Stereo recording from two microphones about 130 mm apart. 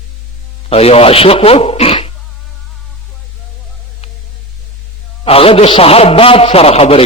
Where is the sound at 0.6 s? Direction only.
50° left (ahead or behind).